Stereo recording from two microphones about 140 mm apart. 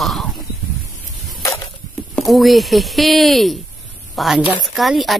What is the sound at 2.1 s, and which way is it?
A woman's voice, centre (ahead or behind).